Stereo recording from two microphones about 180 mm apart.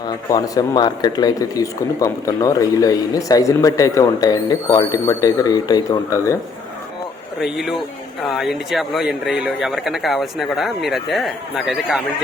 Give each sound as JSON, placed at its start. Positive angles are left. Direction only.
{"t": 0.3, "sound": "speech", "side_deg": 20}
{"t": 7.3, "sound": "speech", "side_deg": 0}